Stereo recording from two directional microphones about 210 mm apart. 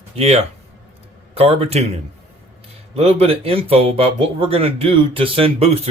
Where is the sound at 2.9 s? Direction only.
30° right (ahead or behind).